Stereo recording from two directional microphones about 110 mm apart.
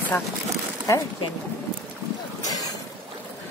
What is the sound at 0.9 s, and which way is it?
Speech, 25° left (ahead or behind).